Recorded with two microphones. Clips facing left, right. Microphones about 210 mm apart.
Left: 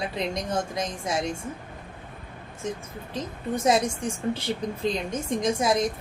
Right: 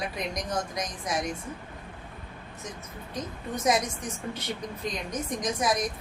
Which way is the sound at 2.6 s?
30° left (ahead or behind).